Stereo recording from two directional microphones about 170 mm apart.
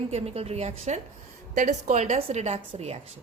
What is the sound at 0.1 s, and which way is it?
A woman's voice, 40° right (ahead or behind).